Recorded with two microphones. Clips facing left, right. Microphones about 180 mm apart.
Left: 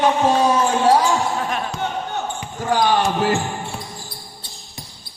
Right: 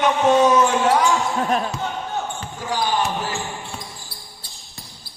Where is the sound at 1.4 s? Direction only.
40° right (ahead or behind).